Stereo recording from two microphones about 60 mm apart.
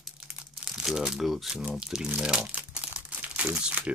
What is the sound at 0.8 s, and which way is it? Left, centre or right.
Speech, centre.